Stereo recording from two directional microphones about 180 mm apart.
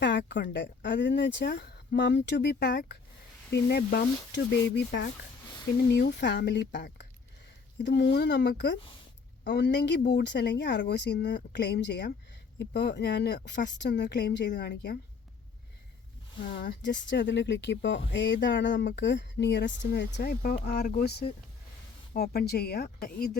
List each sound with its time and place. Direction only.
0.0 s a sound: 80° left
0.5 s speech: 80° left; by 14.9 s 65° left (ahead or behind)
16.4 s speech: 70° left (ahead or behind); by 18.9 s 90° left
18.9 s speech: 75° left (ahead or behind); by 23.4 s 55° left (ahead or behind)